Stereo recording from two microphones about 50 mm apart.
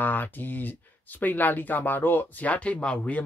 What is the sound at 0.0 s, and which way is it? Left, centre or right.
Speech, left.